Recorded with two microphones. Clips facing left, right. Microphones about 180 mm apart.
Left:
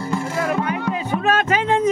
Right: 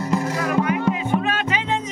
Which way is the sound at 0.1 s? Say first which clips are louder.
Even; 30° left (ahead or behind).